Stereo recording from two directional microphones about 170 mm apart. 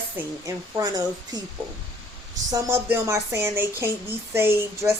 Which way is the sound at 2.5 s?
20° right (ahead or behind).